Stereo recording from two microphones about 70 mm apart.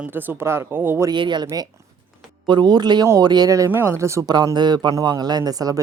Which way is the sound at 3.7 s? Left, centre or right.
Right.